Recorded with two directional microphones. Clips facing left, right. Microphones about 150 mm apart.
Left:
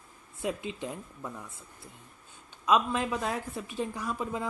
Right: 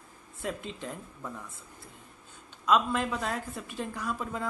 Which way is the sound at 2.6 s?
10° left (ahead or behind).